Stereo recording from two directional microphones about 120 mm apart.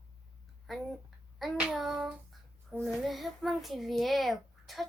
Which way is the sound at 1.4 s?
5° right (ahead or behind).